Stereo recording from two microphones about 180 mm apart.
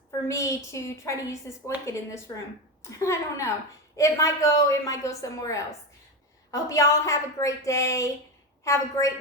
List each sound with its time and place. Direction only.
0.3 s a woman's voice: 15° left (ahead or behind)